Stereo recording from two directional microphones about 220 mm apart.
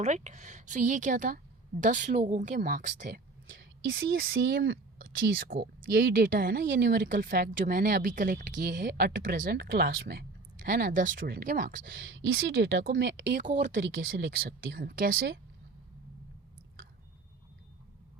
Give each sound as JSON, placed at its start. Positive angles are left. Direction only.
{"t": 0.0, "sound": "speech", "side_deg": -35}
{"t": 4.4, "sound": "speech", "side_deg": -50}
{"t": 5.4, "sound": "speech", "side_deg": -40}
{"t": 11.9, "sound": "speech", "side_deg": -60}